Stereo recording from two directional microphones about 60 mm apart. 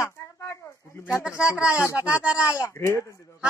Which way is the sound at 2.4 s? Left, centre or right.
Left.